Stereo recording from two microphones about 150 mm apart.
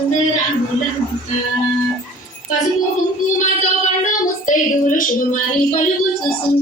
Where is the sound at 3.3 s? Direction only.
55° left (ahead or behind).